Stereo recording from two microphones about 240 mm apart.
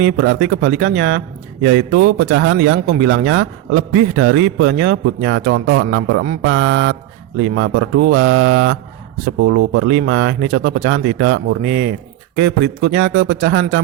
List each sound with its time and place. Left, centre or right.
0.0 s a man's voice: right